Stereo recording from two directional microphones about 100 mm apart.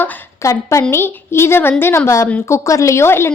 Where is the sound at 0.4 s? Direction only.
30° left (ahead or behind).